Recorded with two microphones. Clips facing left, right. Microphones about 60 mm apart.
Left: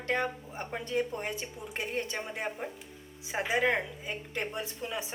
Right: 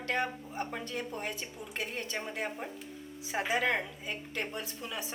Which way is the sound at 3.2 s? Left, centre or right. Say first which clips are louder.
Left 2 dB; left.